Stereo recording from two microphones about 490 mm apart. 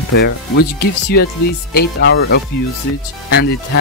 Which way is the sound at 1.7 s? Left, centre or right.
Centre.